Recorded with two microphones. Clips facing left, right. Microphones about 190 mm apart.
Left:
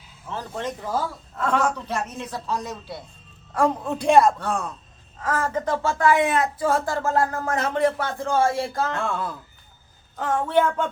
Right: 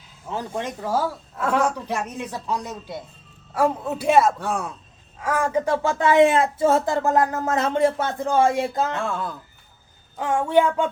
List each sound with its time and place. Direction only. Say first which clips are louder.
0.3 s a man's voice: right 2 dB; 10° right (ahead or behind)
9.0 s speech: even; centre (ahead or behind)
10.2 s a man's voice: right 2 dB; 15° right (ahead or behind)